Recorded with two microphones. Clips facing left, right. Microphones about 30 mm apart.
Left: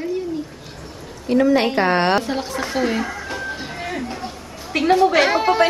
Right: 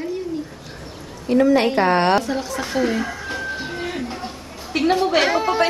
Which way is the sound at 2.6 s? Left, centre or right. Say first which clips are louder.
Even; centre.